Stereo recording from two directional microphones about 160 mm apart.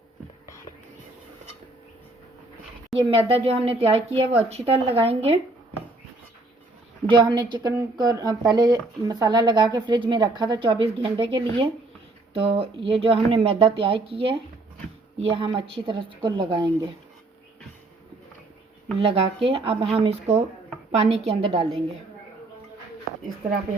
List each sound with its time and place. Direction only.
2.9 s speech: 35° right (ahead or behind)
7.1 s speech: 30° right (ahead or behind)
18.9 s speech: 35° right (ahead or behind)